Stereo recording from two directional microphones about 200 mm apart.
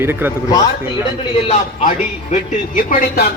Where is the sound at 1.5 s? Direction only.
35° left (ahead or behind).